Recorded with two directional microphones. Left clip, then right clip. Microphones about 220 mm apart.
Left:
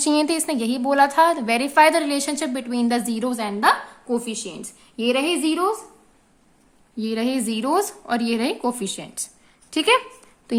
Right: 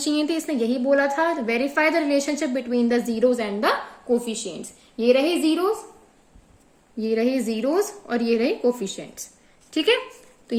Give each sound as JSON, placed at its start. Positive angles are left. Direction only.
{"t": 0.0, "sound": "a woman's voice", "side_deg": 45}
{"t": 7.0, "sound": "a woman's voice", "side_deg": 30}